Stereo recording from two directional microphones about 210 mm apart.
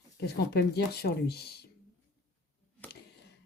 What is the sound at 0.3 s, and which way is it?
Speech, 50° left (ahead or behind).